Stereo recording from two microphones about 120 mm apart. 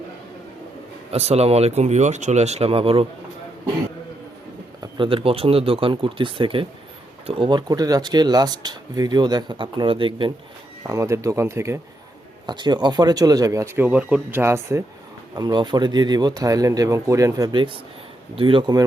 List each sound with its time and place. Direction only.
1.1 s speech: 60° right (ahead or behind)
4.8 s speech: 45° right (ahead or behind)
10.8 s speech: 25° right (ahead or behind)
12.5 s speech: 40° right (ahead or behind); by 14.8 s 20° right (ahead or behind)
15.4 s speech: 35° right (ahead or behind)
18.3 s speech: 45° right (ahead or behind)